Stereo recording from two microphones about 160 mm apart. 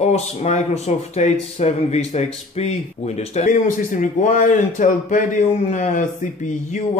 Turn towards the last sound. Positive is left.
turn(degrees=50)  # may be behind; listen again after turning